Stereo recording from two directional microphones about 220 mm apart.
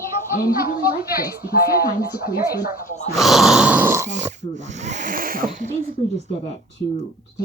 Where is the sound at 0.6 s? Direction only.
45° left (ahead or behind).